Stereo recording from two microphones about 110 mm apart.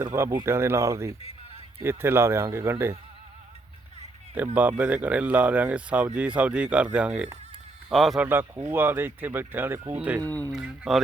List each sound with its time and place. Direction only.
0.0 s speech: 25° right (ahead or behind)
4.4 s speech: 15° right (ahead or behind)
8.2 s speech: 20° right (ahead or behind)
10.2 s speech: 15° left (ahead or behind)
10.5 s speech: 5° right (ahead or behind)